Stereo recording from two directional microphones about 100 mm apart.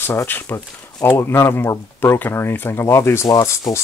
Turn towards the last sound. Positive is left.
turn(degrees=35)  # may be behind; listen again after turning